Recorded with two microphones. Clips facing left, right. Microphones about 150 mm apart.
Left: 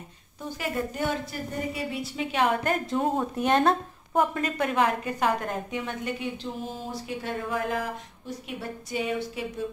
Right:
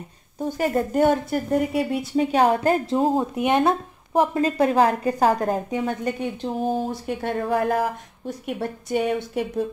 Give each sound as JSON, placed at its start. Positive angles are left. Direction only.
{"t": 0.4, "sound": "a woman's voice", "side_deg": -45}
{"t": 2.1, "sound": "a woman's voice", "side_deg": -35}
{"t": 3.3, "sound": "speech", "side_deg": -15}
{"t": 4.1, "sound": "a woman's voice", "side_deg": -25}
{"t": 8.5, "sound": "a woman's voice", "side_deg": -55}